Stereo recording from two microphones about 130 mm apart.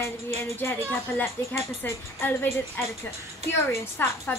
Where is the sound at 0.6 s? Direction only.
15° left (ahead or behind).